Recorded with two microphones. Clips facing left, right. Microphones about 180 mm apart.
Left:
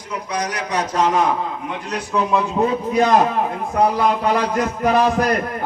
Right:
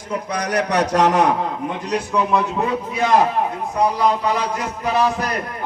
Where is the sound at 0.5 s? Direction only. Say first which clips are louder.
Right 7 dB; 70° right (ahead or behind).